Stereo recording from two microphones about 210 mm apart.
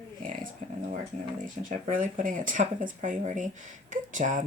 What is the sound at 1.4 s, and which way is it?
Speech, 40° right (ahead or behind).